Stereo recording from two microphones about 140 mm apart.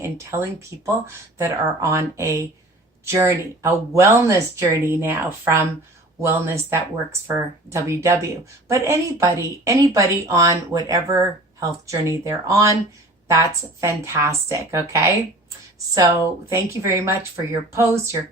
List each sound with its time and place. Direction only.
0.0 s a woman's voice: 20° right (ahead or behind)